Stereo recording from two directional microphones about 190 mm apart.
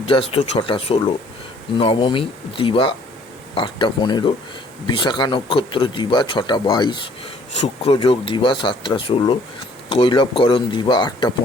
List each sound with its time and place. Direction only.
0.0 s speech: 30° left (ahead or behind)